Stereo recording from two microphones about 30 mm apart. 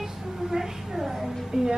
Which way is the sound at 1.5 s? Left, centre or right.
Centre.